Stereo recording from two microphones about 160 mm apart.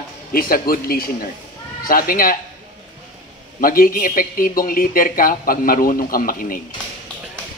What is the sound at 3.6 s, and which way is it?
A man's voice, 60° left (ahead or behind).